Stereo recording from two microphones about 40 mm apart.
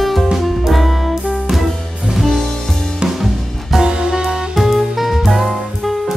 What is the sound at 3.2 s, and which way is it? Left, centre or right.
Music, centre.